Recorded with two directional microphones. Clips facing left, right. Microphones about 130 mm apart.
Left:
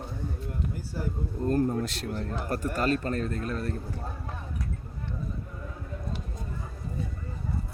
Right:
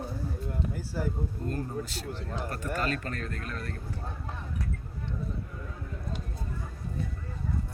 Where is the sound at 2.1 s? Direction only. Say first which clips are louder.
Left 5 dB; 45° left (ahead or behind); by 3.8 s 30° left (ahead or behind).